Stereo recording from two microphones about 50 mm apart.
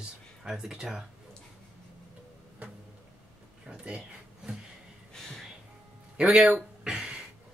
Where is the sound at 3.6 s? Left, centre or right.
Right.